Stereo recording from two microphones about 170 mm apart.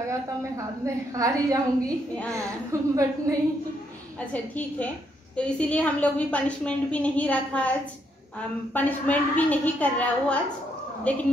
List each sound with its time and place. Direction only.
0.1 s a woman's voice: 20° right (ahead or behind)
4.3 s a woman's voice: 10° left (ahead or behind)